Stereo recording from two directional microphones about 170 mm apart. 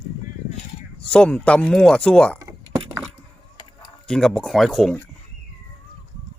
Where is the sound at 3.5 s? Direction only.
25° left (ahead or behind).